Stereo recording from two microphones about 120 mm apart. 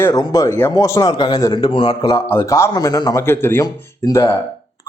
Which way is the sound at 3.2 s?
20° left (ahead or behind).